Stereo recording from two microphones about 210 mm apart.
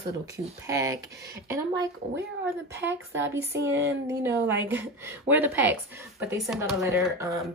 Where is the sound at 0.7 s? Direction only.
15° right (ahead or behind).